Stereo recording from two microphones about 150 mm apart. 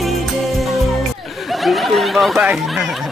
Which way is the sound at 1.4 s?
Centre (ahead or behind).